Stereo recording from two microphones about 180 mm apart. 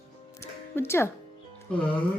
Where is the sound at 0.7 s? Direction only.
15° left (ahead or behind).